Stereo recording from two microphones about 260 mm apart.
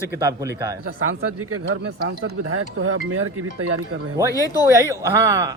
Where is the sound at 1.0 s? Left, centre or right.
Right.